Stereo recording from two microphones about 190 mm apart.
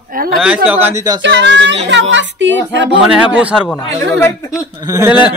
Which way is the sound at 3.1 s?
5° right (ahead or behind).